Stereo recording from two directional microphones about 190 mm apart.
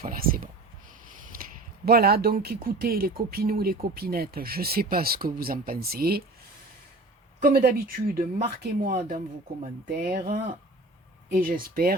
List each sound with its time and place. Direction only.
0.0 s speech: 50° right (ahead or behind)
1.3 s a sound: 50° right (ahead or behind)
1.8 s speech: 55° right (ahead or behind)
7.4 s speech: 50° right (ahead or behind)